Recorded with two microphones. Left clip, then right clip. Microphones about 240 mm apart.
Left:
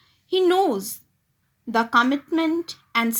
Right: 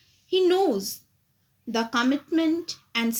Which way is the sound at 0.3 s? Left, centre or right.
Left.